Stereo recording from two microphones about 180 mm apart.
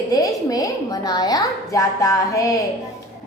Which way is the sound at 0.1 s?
20° left (ahead or behind).